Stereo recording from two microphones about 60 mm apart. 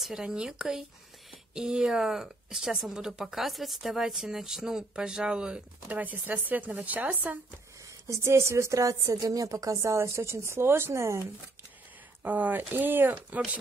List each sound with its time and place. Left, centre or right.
0.0 s speech: centre
5.9 s speech: right
8.1 s a woman's voice: right
12.2 s speech: right